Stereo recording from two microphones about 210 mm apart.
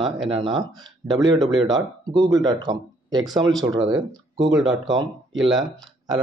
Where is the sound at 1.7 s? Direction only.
20° right (ahead or behind).